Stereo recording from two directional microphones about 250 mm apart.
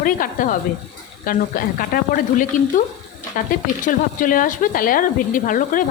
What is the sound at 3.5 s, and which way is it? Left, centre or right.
Speech, left.